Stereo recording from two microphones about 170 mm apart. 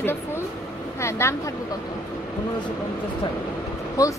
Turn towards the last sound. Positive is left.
turn(degrees=20)  # may be behind; listen again after turning